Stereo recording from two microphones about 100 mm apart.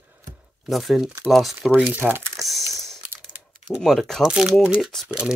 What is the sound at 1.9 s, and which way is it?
Speech, 20° right (ahead or behind).